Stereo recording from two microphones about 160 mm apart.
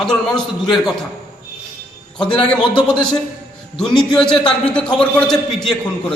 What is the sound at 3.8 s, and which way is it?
A man's voice, 5° left (ahead or behind).